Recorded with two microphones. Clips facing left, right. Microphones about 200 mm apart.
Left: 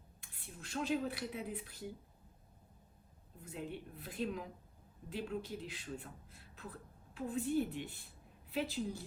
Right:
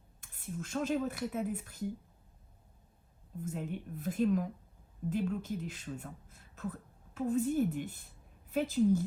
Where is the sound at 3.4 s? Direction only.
45° right (ahead or behind).